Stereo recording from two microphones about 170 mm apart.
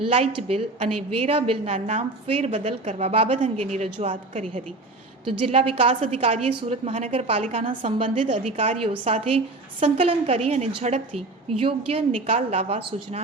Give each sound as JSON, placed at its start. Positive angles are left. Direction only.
{"t": 0.0, "sound": "a woman's voice", "side_deg": -35}
{"t": 5.2, "sound": "a woman's voice", "side_deg": -35}